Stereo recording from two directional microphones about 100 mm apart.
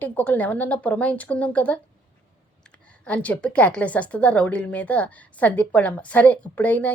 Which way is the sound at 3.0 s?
15° left (ahead or behind).